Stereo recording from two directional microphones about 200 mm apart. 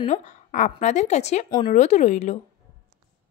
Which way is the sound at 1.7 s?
35° left (ahead or behind).